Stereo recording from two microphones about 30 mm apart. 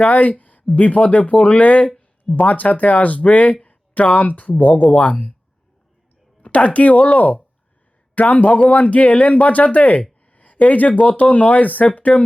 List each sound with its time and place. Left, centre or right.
0.1 s speech: left
4.9 s speech: left
6.4 s speech: left